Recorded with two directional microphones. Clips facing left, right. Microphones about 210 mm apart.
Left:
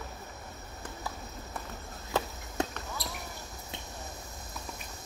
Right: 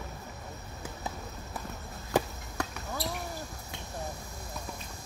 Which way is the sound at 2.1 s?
15° right (ahead or behind).